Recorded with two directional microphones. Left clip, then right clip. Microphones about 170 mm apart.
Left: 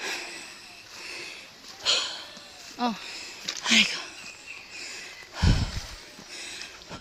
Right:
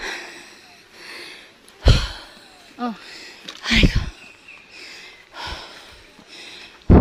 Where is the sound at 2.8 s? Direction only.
60° right (ahead or behind).